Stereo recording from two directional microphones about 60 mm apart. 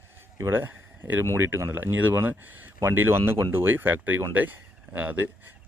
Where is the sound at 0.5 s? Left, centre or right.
Right.